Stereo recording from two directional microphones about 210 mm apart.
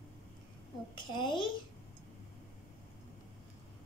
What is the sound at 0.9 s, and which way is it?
Speech, 20° left (ahead or behind).